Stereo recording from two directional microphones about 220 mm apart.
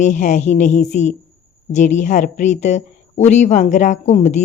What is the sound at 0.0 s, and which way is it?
Speech, 35° left (ahead or behind).